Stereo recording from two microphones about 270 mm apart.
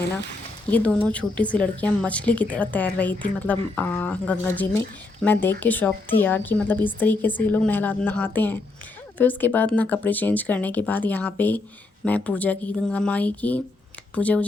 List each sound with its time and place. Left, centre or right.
0.7 s a woman's voice: centre